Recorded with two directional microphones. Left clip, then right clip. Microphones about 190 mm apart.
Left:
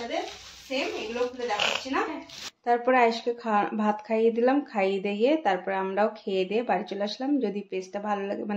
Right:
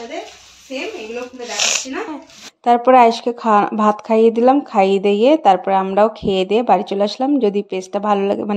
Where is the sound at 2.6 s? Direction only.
45° right (ahead or behind).